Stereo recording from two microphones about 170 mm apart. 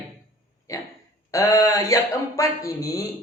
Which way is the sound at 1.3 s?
20° left (ahead or behind).